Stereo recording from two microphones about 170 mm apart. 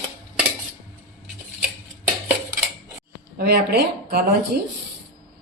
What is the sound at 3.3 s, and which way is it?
Speech, 65° right (ahead or behind).